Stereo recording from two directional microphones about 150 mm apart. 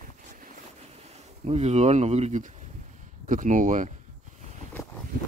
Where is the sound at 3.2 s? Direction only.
60° right (ahead or behind).